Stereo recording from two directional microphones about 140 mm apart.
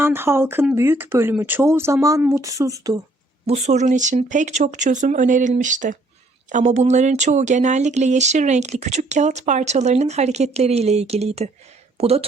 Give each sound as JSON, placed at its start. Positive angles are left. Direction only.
{"t": 0.0, "sound": "speech", "side_deg": -15}
{"t": 3.4, "sound": "speech", "side_deg": -50}